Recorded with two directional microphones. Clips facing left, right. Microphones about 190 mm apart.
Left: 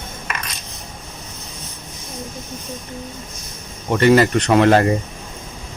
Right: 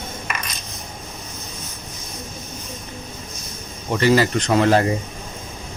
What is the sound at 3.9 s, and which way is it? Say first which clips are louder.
Speech: left 4 dB; 60° left (ahead or behind).